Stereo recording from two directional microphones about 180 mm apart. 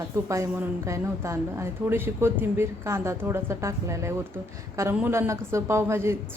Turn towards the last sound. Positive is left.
turn(degrees=-15)  # may be behind; listen again after turning